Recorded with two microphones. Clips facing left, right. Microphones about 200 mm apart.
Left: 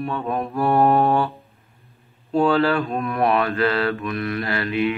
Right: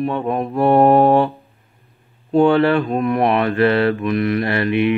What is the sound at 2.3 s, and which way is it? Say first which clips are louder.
Mantra: right 5 dB; 25° right (ahead or behind).